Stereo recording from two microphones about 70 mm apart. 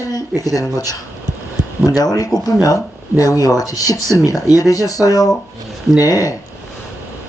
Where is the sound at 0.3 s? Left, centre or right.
Left.